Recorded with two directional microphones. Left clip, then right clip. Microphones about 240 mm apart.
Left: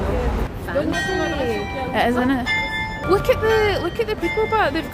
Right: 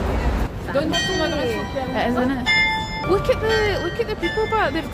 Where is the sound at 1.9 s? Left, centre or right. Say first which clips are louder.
Left 3 dB; centre.